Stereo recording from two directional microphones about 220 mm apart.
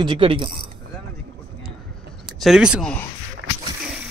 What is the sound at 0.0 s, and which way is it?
Speech, 25° right (ahead or behind).